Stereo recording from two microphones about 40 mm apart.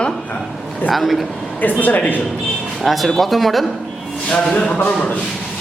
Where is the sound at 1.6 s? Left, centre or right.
Left.